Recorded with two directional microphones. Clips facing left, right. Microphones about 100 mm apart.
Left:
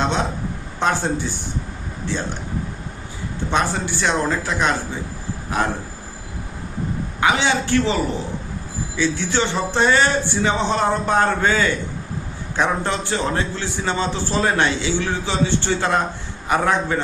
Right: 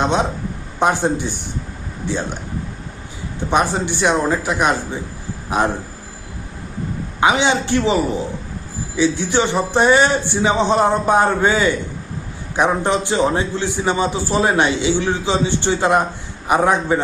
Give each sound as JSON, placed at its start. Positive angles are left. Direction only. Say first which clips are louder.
{"t": 0.8, "sound": "a man's voice", "louder": "right 4 dB", "side_deg": -15}
{"t": 3.5, "sound": "a man's voice", "louder": "right 4 dB", "side_deg": -15}
{"t": 7.2, "sound": "a man's voice", "louder": "right 3 dB", "side_deg": -20}
{"t": 9.0, "sound": "a man's voice", "louder": "right 4 dB", "side_deg": -15}